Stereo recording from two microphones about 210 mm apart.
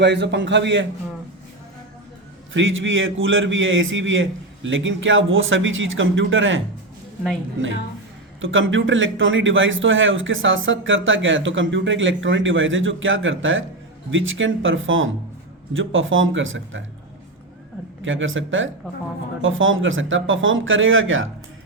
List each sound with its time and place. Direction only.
0.0 s a man's voice: 55° right (ahead or behind)
2.5 s a man's voice: 65° right (ahead or behind)
8.4 s a man's voice: 70° right (ahead or behind)
18.0 s a man's voice: 65° right (ahead or behind)